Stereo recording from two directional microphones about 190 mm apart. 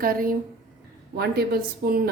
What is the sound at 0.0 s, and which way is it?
A woman's voice, 50° right (ahead or behind).